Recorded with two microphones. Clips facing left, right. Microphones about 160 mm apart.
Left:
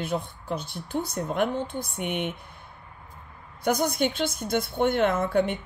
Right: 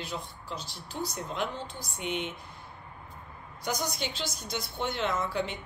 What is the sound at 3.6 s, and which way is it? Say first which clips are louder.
A woman's voice: left 9 dB; 55° left (ahead or behind).